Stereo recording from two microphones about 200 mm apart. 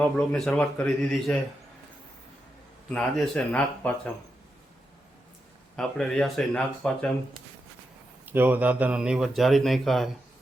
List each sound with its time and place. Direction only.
0.0 s speech: 5° left (ahead or behind)
2.9 s speech: 5° left (ahead or behind)
5.7 s speech: 5° left (ahead or behind)
8.3 s speech: 10° right (ahead or behind)